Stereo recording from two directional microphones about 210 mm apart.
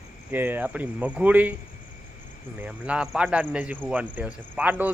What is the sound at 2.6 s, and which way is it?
Speech, 5° right (ahead or behind).